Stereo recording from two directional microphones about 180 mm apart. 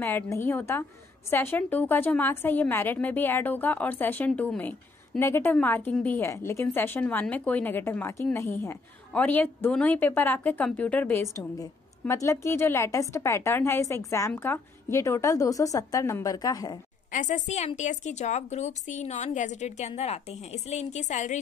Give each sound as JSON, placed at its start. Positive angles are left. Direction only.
{"t": 0.0, "sound": "a woman's voice", "side_deg": 15}
{"t": 17.1, "sound": "a woman's voice", "side_deg": 45}